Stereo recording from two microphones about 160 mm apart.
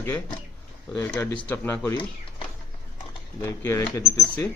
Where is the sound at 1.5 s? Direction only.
15° left (ahead or behind).